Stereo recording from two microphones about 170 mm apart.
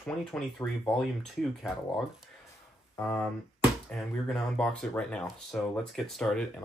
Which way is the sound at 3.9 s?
5° left (ahead or behind).